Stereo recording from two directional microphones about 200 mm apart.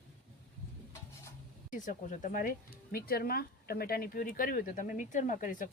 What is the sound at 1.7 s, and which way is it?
Speech, 40° left (ahead or behind).